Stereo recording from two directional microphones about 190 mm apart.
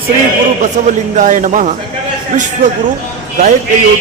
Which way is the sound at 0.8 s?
40° right (ahead or behind).